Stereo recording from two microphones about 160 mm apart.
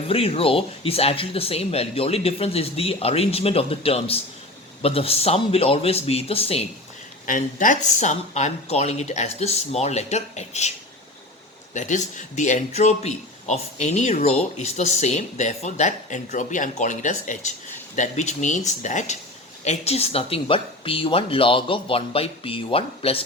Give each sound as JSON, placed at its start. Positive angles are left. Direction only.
{"t": 0.1, "sound": "speech", "side_deg": 35}
{"t": 7.3, "sound": "speech", "side_deg": 55}
{"t": 11.7, "sound": "speech", "side_deg": 50}